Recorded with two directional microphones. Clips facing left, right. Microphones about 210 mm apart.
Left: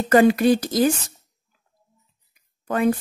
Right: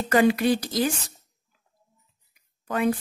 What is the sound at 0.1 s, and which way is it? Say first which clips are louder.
Speech: left 5 dB; 45° left (ahead or behind).